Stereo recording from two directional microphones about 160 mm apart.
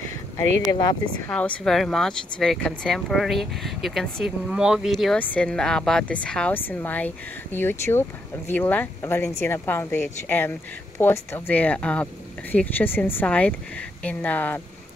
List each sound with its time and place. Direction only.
0.4 s speech: 15° left (ahead or behind)
0.7 s speech: 25° left (ahead or behind)
1.3 s speech: 5° left (ahead or behind)